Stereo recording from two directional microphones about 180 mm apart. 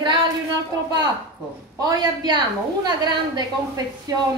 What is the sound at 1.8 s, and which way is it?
A woman's voice, 20° right (ahead or behind).